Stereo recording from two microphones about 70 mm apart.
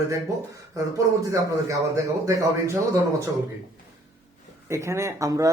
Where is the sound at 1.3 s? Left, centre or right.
Right.